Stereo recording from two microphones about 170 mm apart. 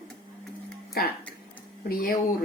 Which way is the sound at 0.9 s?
65° left (ahead or behind).